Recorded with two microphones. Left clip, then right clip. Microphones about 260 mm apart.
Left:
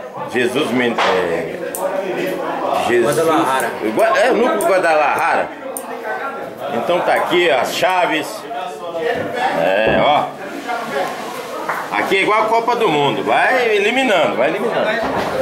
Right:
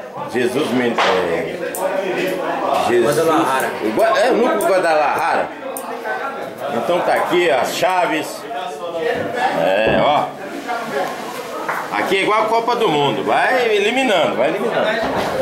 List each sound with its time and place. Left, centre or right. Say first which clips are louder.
0.3 s speech: left 1 dB; centre
6.9 s a man's voice: left 1 dB; centre
11.9 s speech: left 2 dB; centre
15.0 s a sound: even; centre